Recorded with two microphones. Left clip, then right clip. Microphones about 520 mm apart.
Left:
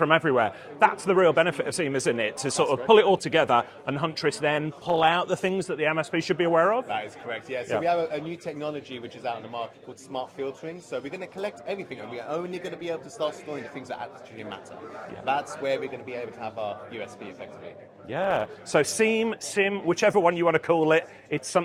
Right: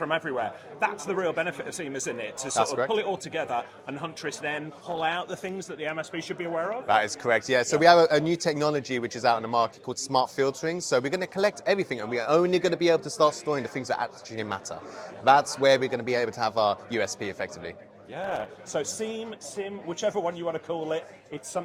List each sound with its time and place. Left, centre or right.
0.0 s a man's voice: left
6.8 s a man's voice: right
9.2 s a man's voice: right
15.2 s a man's voice: right
18.1 s speech: left